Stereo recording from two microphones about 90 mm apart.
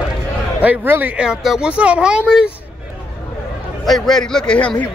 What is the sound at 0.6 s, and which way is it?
Speech, 20° right (ahead or behind).